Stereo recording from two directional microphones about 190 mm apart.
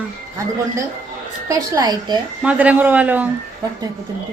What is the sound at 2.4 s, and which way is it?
Speech, 5° right (ahead or behind).